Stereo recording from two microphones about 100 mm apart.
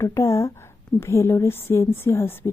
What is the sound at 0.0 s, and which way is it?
Speech, 30° left (ahead or behind).